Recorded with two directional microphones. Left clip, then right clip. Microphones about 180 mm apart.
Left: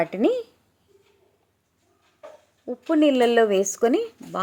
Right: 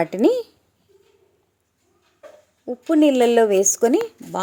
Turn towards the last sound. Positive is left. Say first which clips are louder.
# right 3 dB
turn(degrees=-10)  # may be behind; listen again after turning